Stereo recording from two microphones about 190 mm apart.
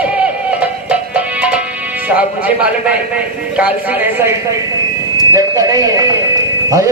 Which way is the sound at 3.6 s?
10° right (ahead or behind).